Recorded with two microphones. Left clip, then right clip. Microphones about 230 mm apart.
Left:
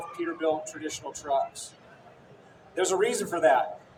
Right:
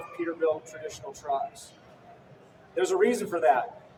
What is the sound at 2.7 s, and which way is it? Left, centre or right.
Speech, left.